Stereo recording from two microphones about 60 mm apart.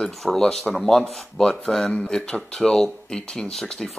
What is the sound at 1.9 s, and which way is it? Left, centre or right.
Speech, centre.